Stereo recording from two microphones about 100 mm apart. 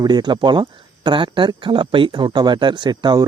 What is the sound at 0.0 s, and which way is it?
Speech, 50° right (ahead or behind).